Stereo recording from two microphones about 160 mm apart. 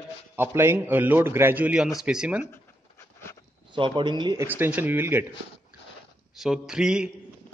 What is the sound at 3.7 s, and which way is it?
Speech, 30° right (ahead or behind).